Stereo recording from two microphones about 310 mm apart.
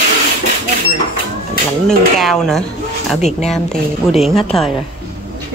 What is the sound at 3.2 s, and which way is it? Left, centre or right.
Speech, left.